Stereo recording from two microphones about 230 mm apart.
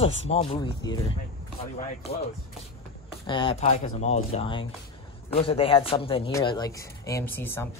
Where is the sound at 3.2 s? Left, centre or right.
Left.